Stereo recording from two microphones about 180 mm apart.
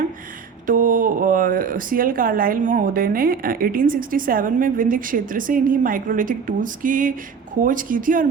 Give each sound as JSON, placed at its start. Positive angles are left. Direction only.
{"t": 0.7, "sound": "speech", "side_deg": -50}